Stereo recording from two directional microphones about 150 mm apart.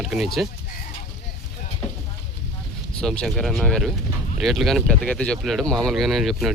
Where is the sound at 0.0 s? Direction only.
Centre (ahead or behind).